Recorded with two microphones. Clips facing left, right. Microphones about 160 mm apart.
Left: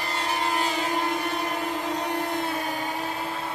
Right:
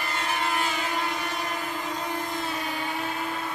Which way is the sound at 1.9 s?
70° left (ahead or behind).